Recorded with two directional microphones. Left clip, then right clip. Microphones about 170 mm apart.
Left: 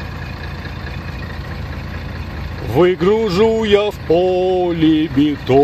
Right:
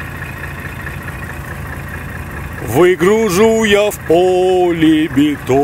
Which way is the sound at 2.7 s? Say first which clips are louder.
Right 3 dB; centre (ahead or behind).